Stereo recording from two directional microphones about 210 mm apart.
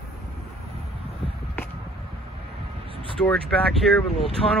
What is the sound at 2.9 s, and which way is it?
Vehicle, 25° right (ahead or behind).